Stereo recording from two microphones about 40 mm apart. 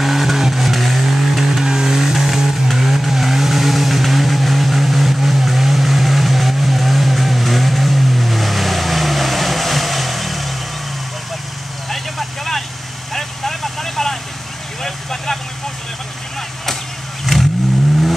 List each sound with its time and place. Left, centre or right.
0.0 s vehicle: centre
11.9 s vehicle: centre
17.3 s vehicle: centre